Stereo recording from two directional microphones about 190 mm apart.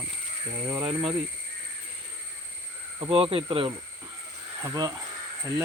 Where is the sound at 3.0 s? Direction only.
30° right (ahead or behind).